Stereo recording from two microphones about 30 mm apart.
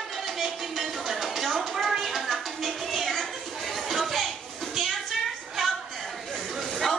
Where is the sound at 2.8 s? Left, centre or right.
Centre.